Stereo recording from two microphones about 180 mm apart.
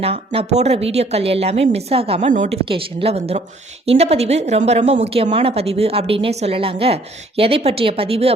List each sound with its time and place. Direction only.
0.0 s speech: 35° right (ahead or behind)
2.3 s speech: 45° right (ahead or behind)
2.6 s speech: 30° right (ahead or behind)